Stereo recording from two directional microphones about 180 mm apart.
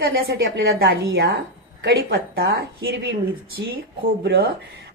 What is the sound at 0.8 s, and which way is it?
A woman's voice, 60° right (ahead or behind).